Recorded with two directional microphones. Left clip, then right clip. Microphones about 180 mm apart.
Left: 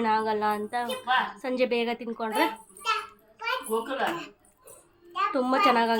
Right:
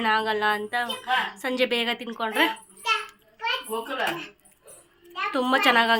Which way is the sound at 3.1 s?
45° left (ahead or behind).